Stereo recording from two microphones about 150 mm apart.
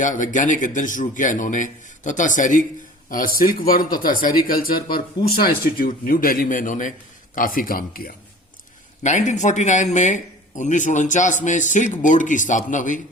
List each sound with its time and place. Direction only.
0.0 s speech: 60° left (ahead or behind)
3.1 s speech: 70° left (ahead or behind)
9.0 s speech: 55° left (ahead or behind)